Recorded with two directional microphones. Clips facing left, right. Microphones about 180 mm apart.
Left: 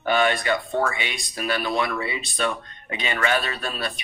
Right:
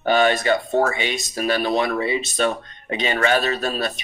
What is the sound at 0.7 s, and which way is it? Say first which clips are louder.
Speech: right 5 dB; 40° right (ahead or behind).